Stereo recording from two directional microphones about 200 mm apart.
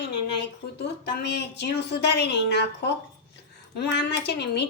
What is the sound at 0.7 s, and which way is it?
Speech, 60° left (ahead or behind).